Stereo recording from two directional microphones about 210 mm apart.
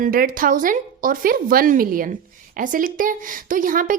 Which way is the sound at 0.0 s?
40° right (ahead or behind).